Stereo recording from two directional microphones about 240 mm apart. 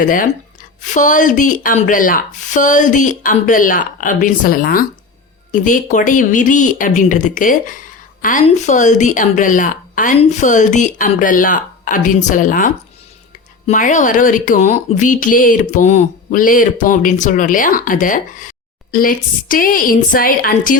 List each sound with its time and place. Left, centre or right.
0.0 s speech: left